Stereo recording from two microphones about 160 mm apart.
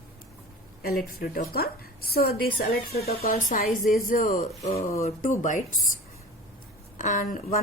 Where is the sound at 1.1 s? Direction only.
70° left (ahead or behind).